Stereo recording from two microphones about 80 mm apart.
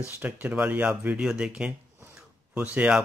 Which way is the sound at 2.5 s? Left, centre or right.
Right.